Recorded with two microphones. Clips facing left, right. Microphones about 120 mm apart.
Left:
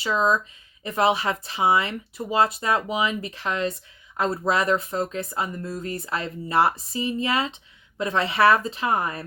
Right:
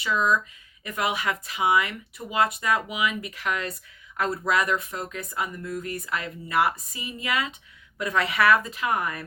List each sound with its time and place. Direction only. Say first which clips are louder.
0.0 s speech: left 2 dB; 30° left (ahead or behind)